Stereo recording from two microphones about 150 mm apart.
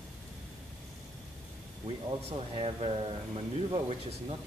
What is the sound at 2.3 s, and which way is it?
Speech, 35° right (ahead or behind).